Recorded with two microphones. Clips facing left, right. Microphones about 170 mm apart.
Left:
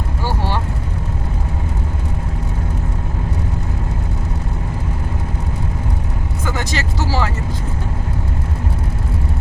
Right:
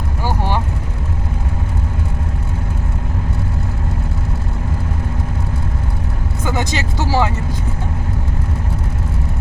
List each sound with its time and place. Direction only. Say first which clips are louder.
0.3 s vehicle: right 2 dB; 15° right (ahead or behind)
6.4 s vehicle: right 3 dB; 20° right (ahead or behind)